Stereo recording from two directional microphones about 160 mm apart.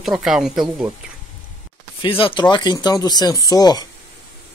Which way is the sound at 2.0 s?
35° left (ahead or behind).